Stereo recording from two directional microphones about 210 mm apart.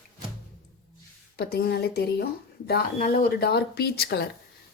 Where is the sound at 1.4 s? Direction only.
50° left (ahead or behind).